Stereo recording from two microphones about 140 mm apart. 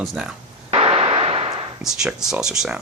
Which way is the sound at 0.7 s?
45° right (ahead or behind).